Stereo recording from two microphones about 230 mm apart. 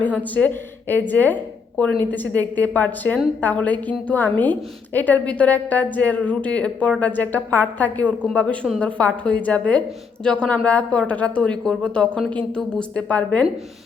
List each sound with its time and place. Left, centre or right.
0.3 s a woman's voice: centre